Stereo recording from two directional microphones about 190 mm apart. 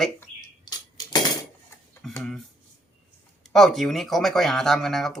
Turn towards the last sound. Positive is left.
turn(degrees=0)  # may be behind; listen again after turning